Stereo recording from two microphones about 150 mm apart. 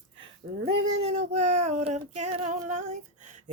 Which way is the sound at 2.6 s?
50° right (ahead or behind).